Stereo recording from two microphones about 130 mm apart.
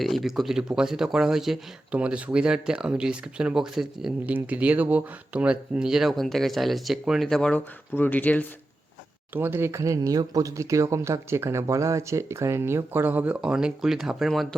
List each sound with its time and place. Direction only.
0.0 s speech: centre (ahead or behind)
9.3 s speech: 15° right (ahead or behind); by 14.4 s centre (ahead or behind)